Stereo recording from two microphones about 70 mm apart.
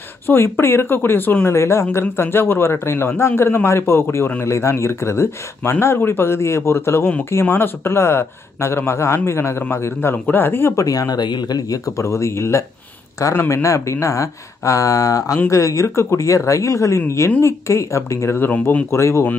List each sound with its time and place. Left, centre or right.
0.3 s speech: left
1.6 s speech: left
10.8 s speech: left
15.3 s speech: left
18.9 s speech: left